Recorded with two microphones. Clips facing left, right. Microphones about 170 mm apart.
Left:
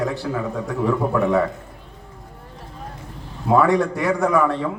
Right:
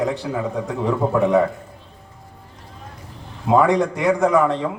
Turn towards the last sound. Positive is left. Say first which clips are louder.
# right 2 dB
turn(degrees=-20)  # may be behind; listen again after turning